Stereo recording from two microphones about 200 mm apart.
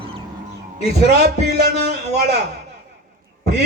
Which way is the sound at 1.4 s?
55° right (ahead or behind).